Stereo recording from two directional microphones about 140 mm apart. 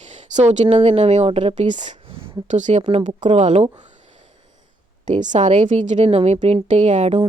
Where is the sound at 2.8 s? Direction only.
40° right (ahead or behind).